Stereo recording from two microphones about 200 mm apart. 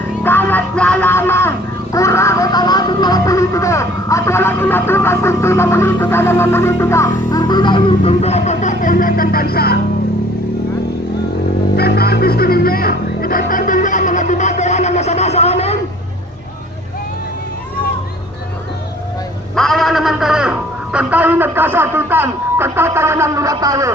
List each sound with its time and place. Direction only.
0.2 s music: 10° left (ahead or behind); by 9.8 s 50° left (ahead or behind)
11.8 s music: 50° left (ahead or behind); by 15.8 s 30° left (ahead or behind)
19.5 s a man's voice: centre (ahead or behind); by 23.9 s 15° right (ahead or behind)